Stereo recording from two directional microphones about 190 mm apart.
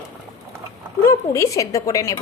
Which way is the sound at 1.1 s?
15° left (ahead or behind).